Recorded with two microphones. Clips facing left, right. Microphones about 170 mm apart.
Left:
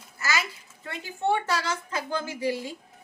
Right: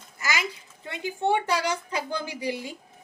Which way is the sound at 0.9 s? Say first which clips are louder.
Right 1 dB; 15° right (ahead or behind).